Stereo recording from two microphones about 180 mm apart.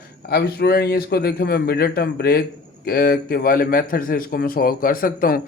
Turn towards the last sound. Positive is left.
turn(degrees=55)  # may be behind; listen again after turning